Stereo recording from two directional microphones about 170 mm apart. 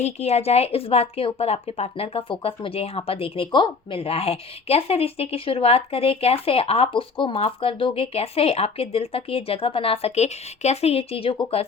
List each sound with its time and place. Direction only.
0.0 s a woman's voice: 40° left (ahead or behind)